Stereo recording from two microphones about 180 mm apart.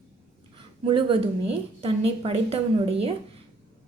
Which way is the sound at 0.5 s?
30° right (ahead or behind).